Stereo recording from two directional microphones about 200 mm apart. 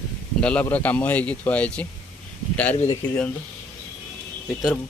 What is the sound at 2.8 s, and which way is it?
Speech, 10° left (ahead or behind).